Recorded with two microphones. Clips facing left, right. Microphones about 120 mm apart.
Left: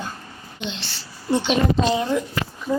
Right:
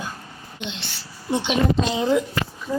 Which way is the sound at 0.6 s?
15° right (ahead or behind).